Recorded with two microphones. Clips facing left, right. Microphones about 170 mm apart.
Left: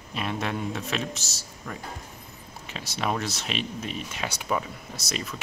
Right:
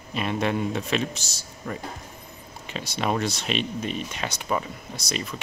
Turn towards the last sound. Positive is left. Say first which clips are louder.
# right 2 dB
turn(degrees=0)  # may be behind; listen again after turning